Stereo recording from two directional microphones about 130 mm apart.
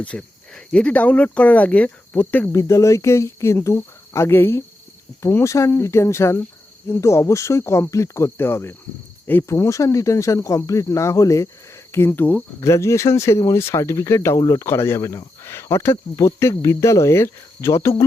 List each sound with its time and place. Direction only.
0.0 s speech: 10° left (ahead or behind); by 18.0 s 25° left (ahead or behind)